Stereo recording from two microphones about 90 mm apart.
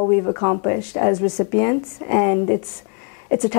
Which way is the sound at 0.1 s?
25° left (ahead or behind).